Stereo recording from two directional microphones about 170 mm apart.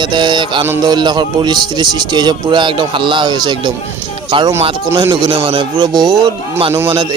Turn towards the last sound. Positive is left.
turn(degrees=-15)  # may be behind; listen again after turning